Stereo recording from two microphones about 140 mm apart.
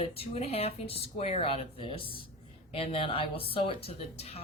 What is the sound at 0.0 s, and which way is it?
Speech, 45° left (ahead or behind).